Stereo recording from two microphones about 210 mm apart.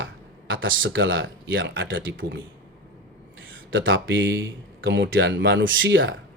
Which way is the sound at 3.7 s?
65° right (ahead or behind).